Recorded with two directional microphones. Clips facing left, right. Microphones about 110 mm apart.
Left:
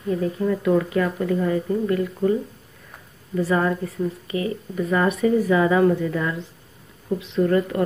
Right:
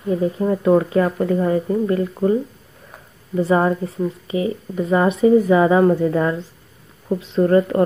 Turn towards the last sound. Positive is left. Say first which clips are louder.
# right 5 dB
turn(degrees=-35)  # may be behind; listen again after turning